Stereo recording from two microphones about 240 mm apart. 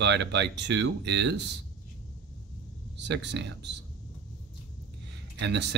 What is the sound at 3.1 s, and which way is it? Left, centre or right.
Speech, right.